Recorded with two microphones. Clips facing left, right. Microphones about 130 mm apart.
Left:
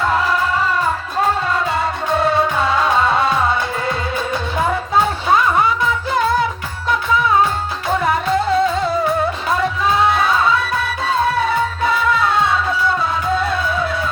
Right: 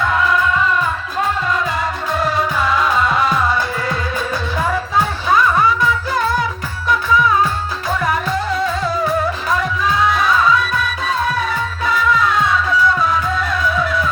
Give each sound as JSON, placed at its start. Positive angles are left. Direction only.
{"t": 0.0, "sound": "music", "side_deg": 30}